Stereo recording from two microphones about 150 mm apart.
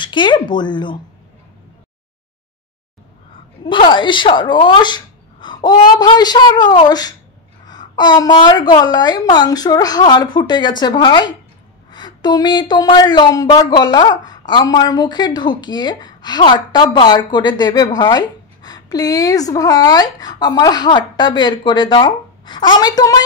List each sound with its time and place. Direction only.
0.0 s speech: 30° left (ahead or behind)
3.6 s a woman's voice: 35° left (ahead or behind)